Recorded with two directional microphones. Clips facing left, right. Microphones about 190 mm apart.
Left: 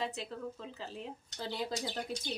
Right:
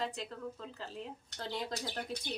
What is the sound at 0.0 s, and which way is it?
Speech, 5° left (ahead or behind).